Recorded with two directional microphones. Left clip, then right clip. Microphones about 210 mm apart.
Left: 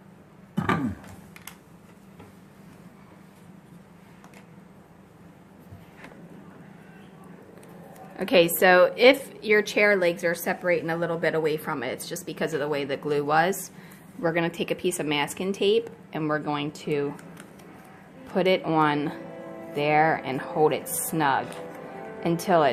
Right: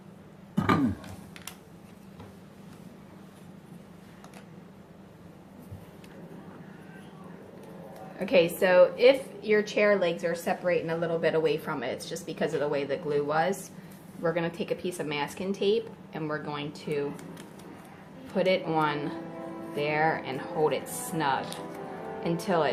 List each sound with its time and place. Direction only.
0.5 s a sound: 20° left (ahead or behind)
8.2 s a woman's voice: 40° left (ahead or behind)
18.3 s speech: 45° left (ahead or behind)